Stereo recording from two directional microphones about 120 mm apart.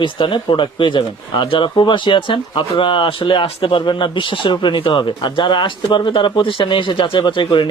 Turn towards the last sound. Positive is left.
turn(degrees=45)  # may be behind; listen again after turning